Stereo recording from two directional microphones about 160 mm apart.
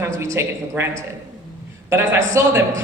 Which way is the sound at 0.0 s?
15° right (ahead or behind).